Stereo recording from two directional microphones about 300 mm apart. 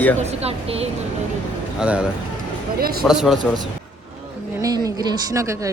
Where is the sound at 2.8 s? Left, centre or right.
Right.